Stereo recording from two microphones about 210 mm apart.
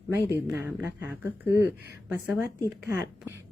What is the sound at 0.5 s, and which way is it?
A woman's voice, 10° right (ahead or behind).